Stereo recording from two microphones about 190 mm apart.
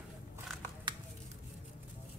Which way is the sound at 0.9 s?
25° right (ahead or behind).